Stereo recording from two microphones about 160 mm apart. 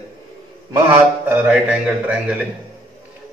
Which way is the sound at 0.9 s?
10° right (ahead or behind).